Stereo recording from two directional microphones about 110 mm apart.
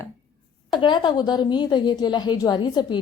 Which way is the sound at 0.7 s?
45° left (ahead or behind).